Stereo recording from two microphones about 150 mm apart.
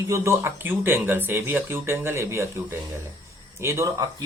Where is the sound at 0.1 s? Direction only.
15° right (ahead or behind).